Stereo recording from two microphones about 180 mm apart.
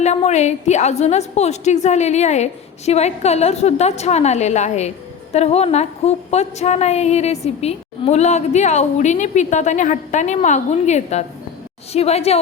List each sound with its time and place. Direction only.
0.0 s a woman's voice: 40° left (ahead or behind)